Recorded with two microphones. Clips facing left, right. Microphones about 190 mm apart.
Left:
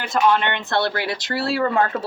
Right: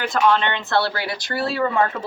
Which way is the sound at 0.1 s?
15° left (ahead or behind).